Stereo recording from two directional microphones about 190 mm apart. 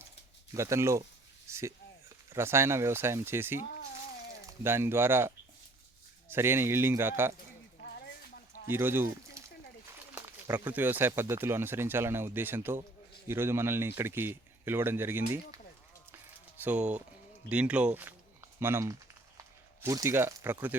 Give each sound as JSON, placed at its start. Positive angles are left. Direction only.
{"t": 0.5, "sound": "speech", "side_deg": -15}
{"t": 8.6, "sound": "speech", "side_deg": -10}